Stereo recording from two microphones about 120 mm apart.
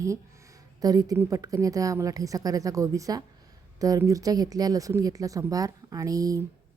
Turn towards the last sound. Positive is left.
turn(degrees=-30)  # may be behind; listen again after turning